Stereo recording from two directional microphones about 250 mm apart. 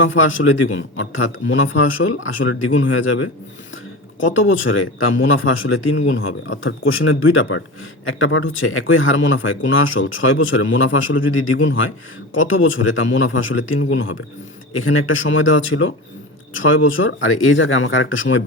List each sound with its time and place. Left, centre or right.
0.0 s speech: left
4.3 s speech: left